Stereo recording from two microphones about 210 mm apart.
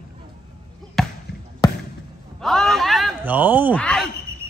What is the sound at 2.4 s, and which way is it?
Speech, centre (ahead or behind).